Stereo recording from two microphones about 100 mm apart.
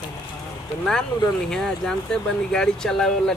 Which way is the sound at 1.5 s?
5° left (ahead or behind).